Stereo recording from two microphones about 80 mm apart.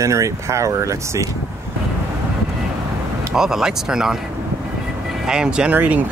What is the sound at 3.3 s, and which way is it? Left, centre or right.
Speech, centre.